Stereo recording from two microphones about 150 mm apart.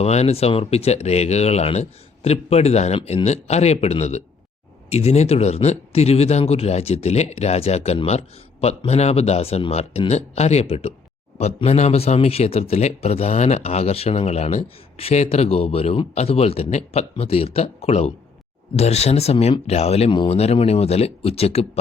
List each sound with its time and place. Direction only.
0.0 s speech: 45° left (ahead or behind)